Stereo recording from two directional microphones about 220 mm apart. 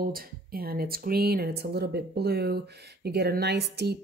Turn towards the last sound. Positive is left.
turn(degrees=-50)  # may be behind; listen again after turning